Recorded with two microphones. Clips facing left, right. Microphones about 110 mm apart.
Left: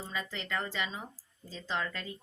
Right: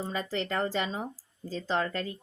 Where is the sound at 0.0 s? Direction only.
45° right (ahead or behind).